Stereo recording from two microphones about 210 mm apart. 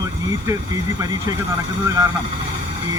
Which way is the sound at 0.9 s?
15° right (ahead or behind).